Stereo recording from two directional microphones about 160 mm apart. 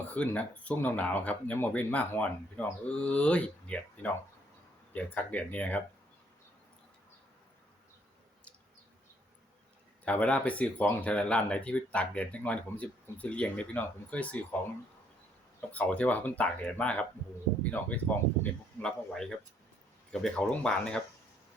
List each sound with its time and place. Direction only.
0.1 s speech: 10° left (ahead or behind)
10.1 s speech: 10° left (ahead or behind)
15.7 s speech: 10° left (ahead or behind)